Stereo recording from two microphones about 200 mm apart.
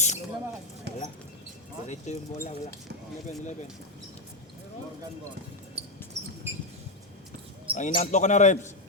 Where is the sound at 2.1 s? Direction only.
35° left (ahead or behind).